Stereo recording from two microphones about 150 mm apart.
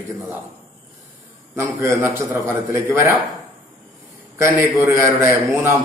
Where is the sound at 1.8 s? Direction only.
20° right (ahead or behind).